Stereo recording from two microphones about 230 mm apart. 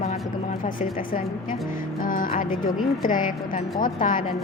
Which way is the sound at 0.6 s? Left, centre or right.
Left.